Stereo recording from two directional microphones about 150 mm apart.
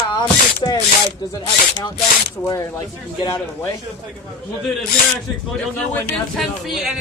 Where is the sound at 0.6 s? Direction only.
35° left (ahead or behind).